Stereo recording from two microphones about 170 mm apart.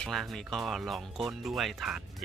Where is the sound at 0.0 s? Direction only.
Centre (ahead or behind).